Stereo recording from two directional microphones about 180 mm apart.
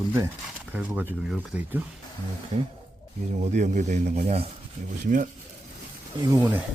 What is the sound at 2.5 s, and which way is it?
Speech, 35° right (ahead or behind).